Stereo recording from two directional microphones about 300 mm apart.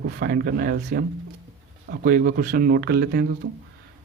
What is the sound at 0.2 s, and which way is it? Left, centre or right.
Speech, right.